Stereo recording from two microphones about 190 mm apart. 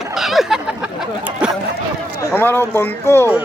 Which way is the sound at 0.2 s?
Centre (ahead or behind).